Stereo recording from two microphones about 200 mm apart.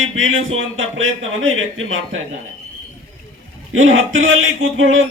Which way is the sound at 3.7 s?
75° right (ahead or behind).